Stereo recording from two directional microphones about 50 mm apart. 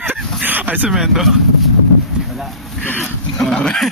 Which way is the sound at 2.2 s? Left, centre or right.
Centre.